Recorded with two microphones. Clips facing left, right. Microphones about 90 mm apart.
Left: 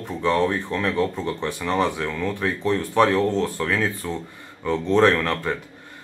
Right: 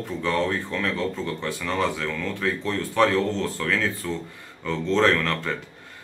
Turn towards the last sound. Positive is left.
turn(degrees=20)  # may be behind; listen again after turning